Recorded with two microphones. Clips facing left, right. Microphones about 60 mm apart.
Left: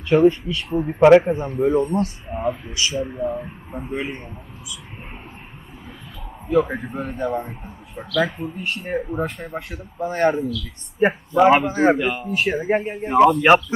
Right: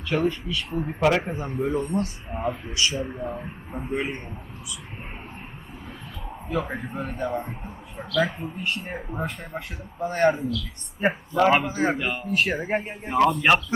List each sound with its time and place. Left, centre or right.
0.1 s speech: left
0.7 s a man's voice: centre
6.5 s a man's voice: centre
11.0 s speech: centre
11.7 s a man's voice: centre